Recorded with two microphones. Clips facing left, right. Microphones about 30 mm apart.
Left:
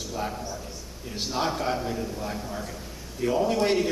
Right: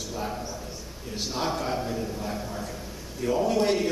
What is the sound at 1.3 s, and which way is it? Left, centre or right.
A man's voice, centre.